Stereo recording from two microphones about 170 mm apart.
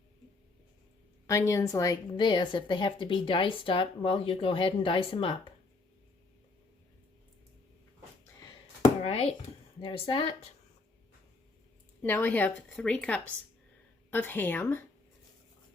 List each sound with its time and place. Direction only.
1.3 s a woman's voice: 15° left (ahead or behind)
9.0 s a sound: 35° left (ahead or behind)
9.8 s speech: 30° left (ahead or behind)
12.0 s a woman's voice: 10° left (ahead or behind)